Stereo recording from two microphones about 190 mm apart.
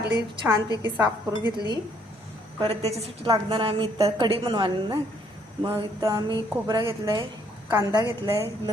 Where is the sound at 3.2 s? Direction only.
20° right (ahead or behind).